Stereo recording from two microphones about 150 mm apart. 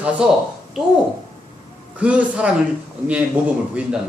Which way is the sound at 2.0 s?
10° right (ahead or behind).